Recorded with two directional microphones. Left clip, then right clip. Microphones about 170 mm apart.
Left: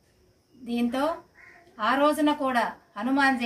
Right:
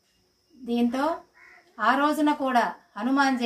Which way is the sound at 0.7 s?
20° left (ahead or behind).